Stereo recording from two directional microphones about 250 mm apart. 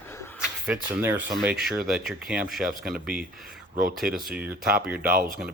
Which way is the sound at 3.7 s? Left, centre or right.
Right.